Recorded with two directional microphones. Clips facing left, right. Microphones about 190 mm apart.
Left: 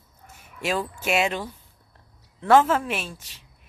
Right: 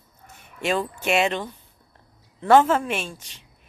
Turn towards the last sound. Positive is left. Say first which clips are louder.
# right 2 dB
turn(degrees=5)  # may be behind; listen again after turning